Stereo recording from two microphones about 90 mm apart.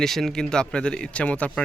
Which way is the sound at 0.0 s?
5° left (ahead or behind).